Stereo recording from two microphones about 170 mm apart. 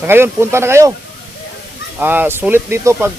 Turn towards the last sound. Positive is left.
turn(degrees=-15)  # may be behind; listen again after turning